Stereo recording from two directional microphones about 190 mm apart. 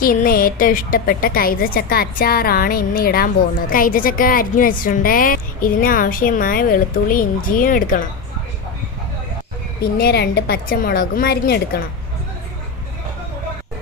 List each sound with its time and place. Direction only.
0.0 s a woman's voice: 50° left (ahead or behind)
10.0 s a woman's voice: 55° left (ahead or behind)